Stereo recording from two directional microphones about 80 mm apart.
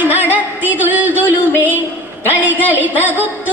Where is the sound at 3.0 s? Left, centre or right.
Right.